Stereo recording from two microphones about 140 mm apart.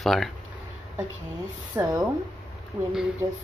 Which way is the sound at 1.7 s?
25° right (ahead or behind).